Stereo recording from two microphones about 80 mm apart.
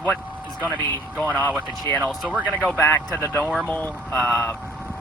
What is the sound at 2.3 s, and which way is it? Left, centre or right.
Speech, centre.